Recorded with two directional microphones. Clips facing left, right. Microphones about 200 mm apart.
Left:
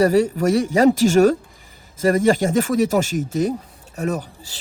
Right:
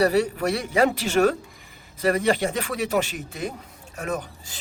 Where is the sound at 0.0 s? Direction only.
45° left (ahead or behind).